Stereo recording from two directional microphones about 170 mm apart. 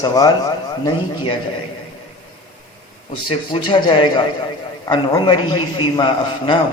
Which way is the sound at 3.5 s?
25° left (ahead or behind).